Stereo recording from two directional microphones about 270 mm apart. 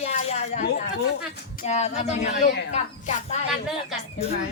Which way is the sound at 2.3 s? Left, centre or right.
Left.